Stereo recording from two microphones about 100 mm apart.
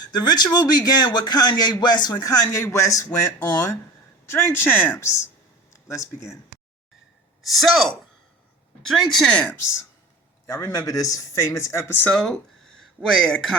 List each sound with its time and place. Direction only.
0.0 s a man's voice: 45° left (ahead or behind)
4.5 s speech: 20° left (ahead or behind)
7.4 s speech: centre (ahead or behind)
9.6 s speech: 25° left (ahead or behind)
12.1 s speech: 5° left (ahead or behind)